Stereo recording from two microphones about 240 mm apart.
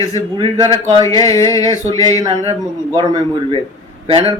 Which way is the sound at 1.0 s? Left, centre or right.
Centre.